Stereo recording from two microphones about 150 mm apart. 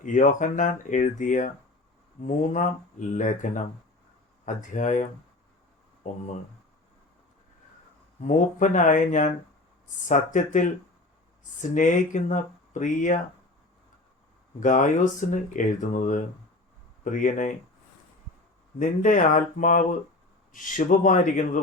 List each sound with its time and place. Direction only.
0.0 s speech: 60° left (ahead or behind)
6.0 s speech: 55° left (ahead or behind)
8.2 s speech: 55° left (ahead or behind)
14.6 s speech: 55° left (ahead or behind)
18.8 s speech: 60° left (ahead or behind)